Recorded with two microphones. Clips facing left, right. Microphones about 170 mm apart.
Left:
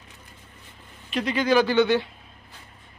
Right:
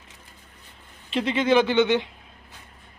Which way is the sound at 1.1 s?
25° right (ahead or behind).